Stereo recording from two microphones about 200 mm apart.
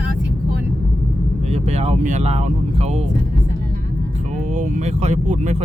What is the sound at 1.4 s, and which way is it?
Speech, 30° right (ahead or behind).